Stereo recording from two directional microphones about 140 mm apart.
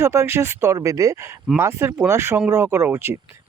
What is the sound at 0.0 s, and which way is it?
Speech, 20° right (ahead or behind).